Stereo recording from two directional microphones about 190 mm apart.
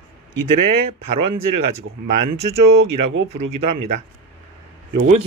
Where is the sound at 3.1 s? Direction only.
75° right (ahead or behind).